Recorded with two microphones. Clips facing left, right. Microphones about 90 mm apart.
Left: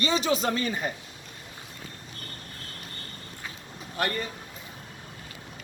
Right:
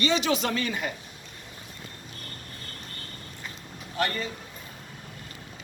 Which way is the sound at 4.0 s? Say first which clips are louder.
Right 1 dB; 35° left (ahead or behind).